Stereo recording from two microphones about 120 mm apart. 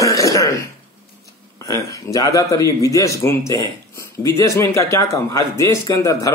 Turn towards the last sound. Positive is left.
turn(degrees=30)  # may be behind; listen again after turning